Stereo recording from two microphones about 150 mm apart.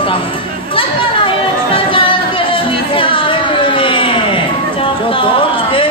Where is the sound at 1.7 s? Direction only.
35° left (ahead or behind).